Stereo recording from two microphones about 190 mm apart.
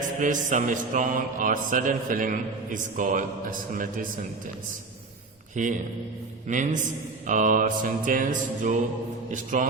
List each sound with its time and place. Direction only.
0.2 s mantra: 40° right (ahead or behind)
5.6 s a man's voice: 40° right (ahead or behind)
7.3 s mantra: 40° right (ahead or behind)